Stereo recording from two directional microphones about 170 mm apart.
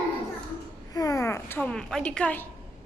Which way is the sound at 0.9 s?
20° left (ahead or behind).